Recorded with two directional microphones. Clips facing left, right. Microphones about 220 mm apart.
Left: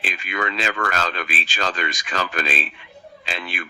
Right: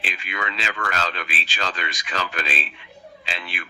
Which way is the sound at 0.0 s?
45° left (ahead or behind).